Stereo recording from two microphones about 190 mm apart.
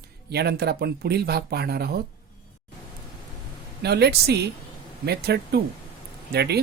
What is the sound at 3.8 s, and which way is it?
Speech, 60° right (ahead or behind).